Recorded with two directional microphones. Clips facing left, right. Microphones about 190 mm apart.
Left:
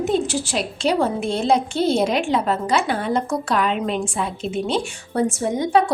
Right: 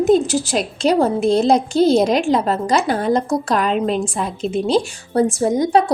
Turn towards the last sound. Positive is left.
turn(degrees=-35)  # may be behind; listen again after turning